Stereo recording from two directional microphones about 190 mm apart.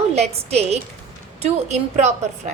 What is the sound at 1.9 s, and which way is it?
Speech, 40° right (ahead or behind).